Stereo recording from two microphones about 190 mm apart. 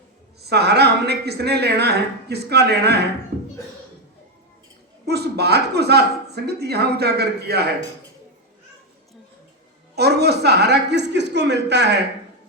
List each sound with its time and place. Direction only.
0.4 s a woman's voice: 60° right (ahead or behind)
5.0 s a woman's voice: 60° right (ahead or behind)
9.9 s a woman's voice: 60° right (ahead or behind)